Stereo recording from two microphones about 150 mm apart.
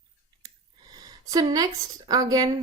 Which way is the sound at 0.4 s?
25° right (ahead or behind).